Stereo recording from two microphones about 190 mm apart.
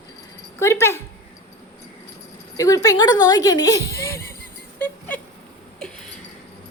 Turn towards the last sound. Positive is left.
turn(degrees=10)  # may be behind; listen again after turning